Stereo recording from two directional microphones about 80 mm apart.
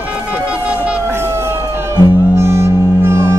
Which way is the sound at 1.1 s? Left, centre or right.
Right.